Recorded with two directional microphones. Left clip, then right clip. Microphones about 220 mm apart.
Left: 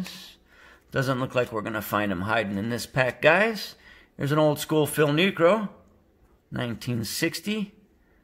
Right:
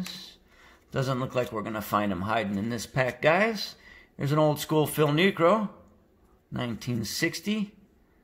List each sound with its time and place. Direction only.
0.0 s speech: 20° left (ahead or behind)